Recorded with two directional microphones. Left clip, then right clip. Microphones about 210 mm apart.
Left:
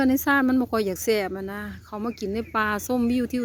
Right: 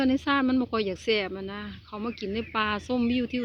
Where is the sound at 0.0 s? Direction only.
30° left (ahead or behind).